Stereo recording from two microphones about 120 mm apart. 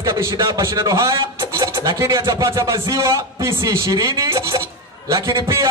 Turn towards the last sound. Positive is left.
turn(degrees=-25)  # may be behind; listen again after turning